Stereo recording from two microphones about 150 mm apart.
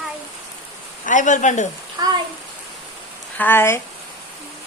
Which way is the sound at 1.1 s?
55° left (ahead or behind).